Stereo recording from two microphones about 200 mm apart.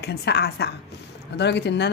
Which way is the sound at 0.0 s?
55° left (ahead or behind).